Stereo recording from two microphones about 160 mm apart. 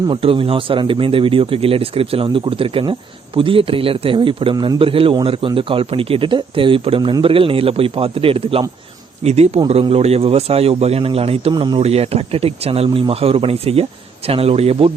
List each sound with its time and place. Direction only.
0.1 s a man's voice: 35° right (ahead or behind)
11.8 s a man's voice: 40° right (ahead or behind)